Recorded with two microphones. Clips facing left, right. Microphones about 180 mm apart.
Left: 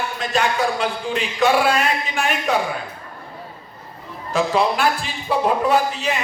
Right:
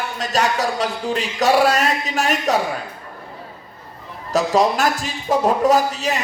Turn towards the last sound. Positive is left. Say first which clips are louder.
# right 1 dB
turn(degrees=-40)  # may be behind; listen again after turning